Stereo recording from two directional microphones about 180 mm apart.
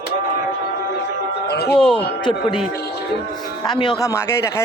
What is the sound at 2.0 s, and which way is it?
Speech, 25° left (ahead or behind).